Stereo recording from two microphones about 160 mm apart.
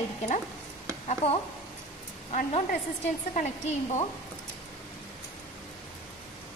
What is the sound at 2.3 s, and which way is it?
A woman's voice, 40° left (ahead or behind).